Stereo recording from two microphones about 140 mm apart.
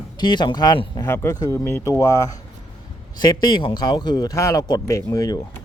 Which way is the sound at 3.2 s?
30° left (ahead or behind).